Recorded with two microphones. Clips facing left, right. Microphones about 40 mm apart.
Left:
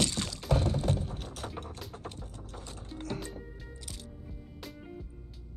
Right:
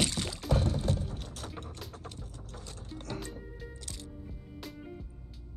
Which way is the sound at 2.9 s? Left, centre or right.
Centre.